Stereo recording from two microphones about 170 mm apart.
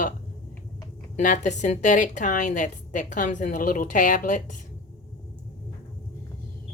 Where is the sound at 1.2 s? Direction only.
45° left (ahead or behind).